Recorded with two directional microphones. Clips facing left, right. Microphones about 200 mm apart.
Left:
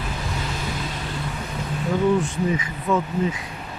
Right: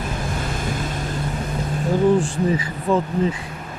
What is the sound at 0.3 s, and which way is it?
Vehicle, 50° right (ahead or behind).